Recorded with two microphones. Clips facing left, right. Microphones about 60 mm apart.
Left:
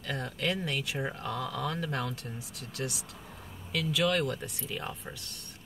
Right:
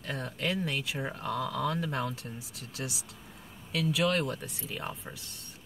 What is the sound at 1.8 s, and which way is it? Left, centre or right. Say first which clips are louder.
Speech: right 1 dB; centre.